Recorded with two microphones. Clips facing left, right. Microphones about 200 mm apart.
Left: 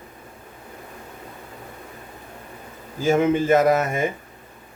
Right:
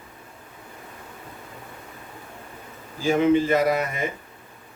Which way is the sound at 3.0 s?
45° left (ahead or behind).